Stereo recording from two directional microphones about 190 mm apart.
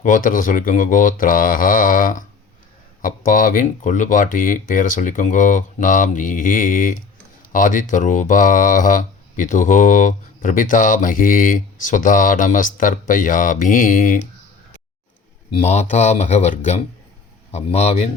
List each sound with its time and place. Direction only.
0.0 s speech: 45° left (ahead or behind)
15.5 s speech: 35° left (ahead or behind)